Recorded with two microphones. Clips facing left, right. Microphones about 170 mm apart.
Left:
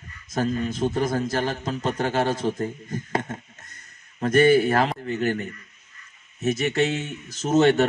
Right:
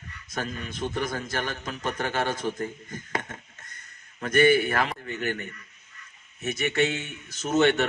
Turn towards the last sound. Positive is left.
turn(degrees=35)  # may be behind; listen again after turning